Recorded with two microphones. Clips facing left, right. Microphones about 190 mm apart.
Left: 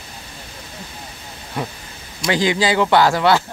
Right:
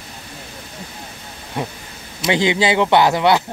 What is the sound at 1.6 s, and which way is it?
Speech, 20° right (ahead or behind).